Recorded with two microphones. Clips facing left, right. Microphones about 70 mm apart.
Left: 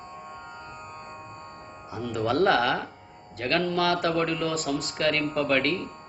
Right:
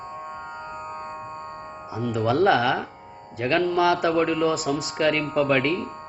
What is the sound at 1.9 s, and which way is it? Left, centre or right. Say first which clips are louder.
Speech: right 3 dB; centre.